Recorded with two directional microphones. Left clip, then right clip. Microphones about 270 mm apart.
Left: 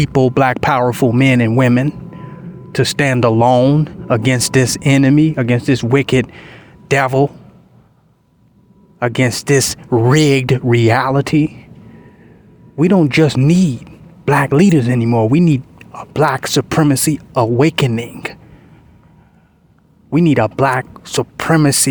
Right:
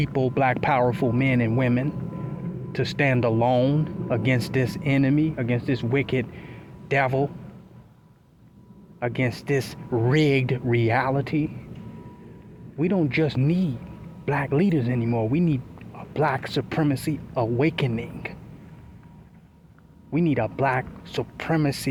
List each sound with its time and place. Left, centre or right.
0.0 s speech: left
9.0 s speech: left
12.7 s speech: left
20.1 s speech: left